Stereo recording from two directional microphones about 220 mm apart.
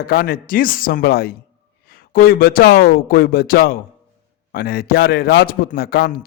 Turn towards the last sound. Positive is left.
turn(degrees=45)  # may be behind; listen again after turning